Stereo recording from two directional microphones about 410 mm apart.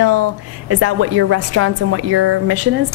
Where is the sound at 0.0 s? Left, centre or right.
Right.